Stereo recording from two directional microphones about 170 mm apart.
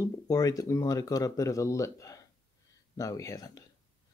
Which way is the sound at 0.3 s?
20° left (ahead or behind).